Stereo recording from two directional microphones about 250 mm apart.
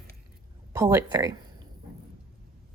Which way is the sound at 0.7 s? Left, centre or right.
Centre.